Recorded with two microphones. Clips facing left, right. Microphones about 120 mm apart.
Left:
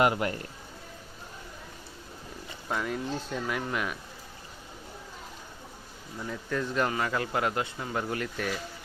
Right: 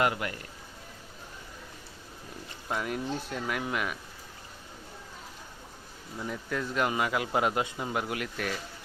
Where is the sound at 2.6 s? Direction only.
5° right (ahead or behind).